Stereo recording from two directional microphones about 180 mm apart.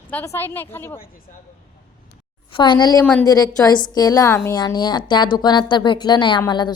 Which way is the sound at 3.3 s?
20° left (ahead or behind).